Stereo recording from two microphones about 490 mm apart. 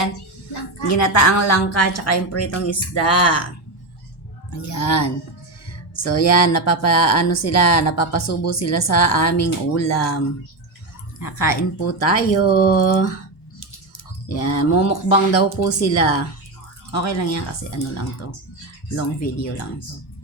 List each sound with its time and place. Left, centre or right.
0.9 s speech: left
4.5 s speech: left
14.3 s speech: left